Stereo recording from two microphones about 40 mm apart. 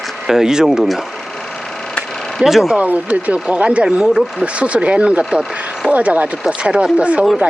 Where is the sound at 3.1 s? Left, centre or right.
Right.